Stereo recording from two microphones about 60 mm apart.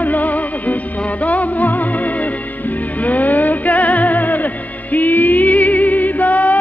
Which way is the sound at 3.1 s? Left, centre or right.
Left.